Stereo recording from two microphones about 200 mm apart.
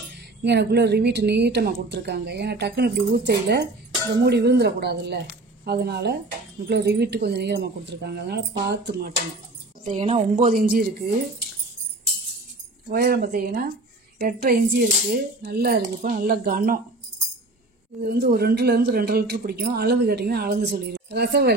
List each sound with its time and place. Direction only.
0.4 s a woman's voice: 55° right (ahead or behind)
9.8 s a woman's voice: 35° right (ahead or behind)
10.5 s a woman's voice: 50° right (ahead or behind)
12.9 s a woman's voice: 50° right (ahead or behind)
18.0 s a woman's voice: 55° right (ahead or behind)